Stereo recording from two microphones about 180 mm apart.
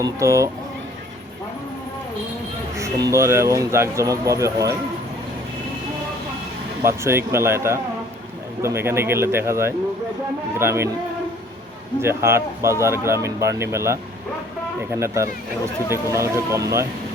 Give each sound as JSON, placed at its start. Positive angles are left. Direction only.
{"t": 0.0, "sound": "speech", "side_deg": -15}
{"t": 2.7, "sound": "speech", "side_deg": -15}
{"t": 6.8, "sound": "speech", "side_deg": -15}
{"t": 12.0, "sound": "speech", "side_deg": -15}